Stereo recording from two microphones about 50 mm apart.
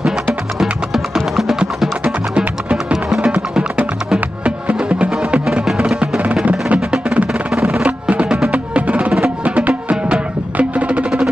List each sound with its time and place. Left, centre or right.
0.0 s music: centre
4.6 s music: right